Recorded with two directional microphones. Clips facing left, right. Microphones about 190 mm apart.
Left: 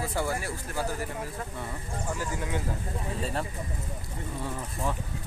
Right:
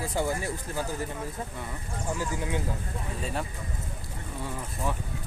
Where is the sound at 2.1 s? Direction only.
20° right (ahead or behind).